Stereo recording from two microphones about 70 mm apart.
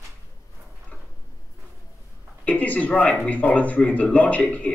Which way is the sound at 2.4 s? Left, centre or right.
Left.